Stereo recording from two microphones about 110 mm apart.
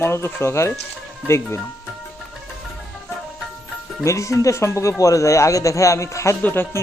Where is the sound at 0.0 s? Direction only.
25° left (ahead or behind).